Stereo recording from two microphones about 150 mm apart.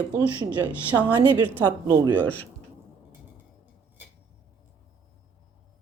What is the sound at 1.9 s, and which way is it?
Speech, 20° right (ahead or behind).